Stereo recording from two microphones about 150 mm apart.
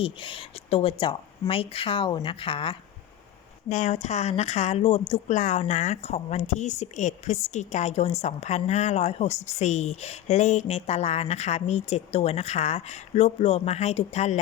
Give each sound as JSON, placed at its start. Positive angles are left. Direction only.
{"t": 0.0, "sound": "speech", "side_deg": 35}
{"t": 3.7, "sound": "speech", "side_deg": 50}